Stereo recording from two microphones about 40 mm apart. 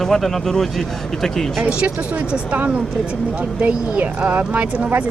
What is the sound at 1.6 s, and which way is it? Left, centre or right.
Speech, right.